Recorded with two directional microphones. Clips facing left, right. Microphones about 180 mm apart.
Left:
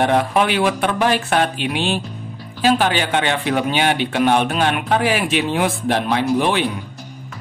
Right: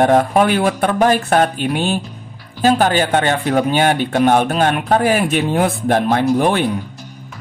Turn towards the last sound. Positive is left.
turn(degrees=-45)  # may be behind; listen again after turning